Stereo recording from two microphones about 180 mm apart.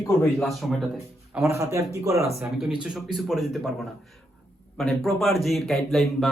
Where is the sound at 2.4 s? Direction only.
Centre (ahead or behind).